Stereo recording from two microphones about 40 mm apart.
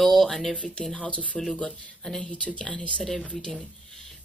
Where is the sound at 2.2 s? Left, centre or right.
Left.